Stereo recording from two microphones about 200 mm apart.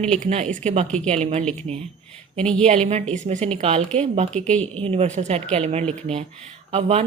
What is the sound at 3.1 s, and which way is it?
Speech, 35° right (ahead or behind).